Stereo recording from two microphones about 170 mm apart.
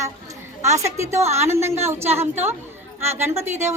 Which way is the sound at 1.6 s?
15° right (ahead or behind).